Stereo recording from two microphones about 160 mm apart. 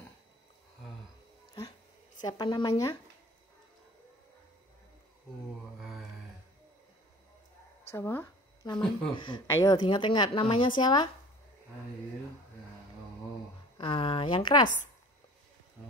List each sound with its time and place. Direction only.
2.2 s speech: 25° left (ahead or behind)
7.9 s speech: 15° left (ahead or behind)
8.6 s speech: 25° left (ahead or behind)
13.7 s speech: 35° left (ahead or behind)